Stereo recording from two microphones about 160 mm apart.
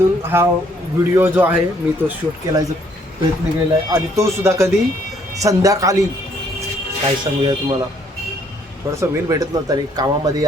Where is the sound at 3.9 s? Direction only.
15° right (ahead or behind).